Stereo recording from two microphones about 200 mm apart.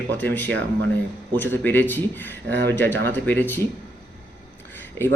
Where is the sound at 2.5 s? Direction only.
60° right (ahead or behind).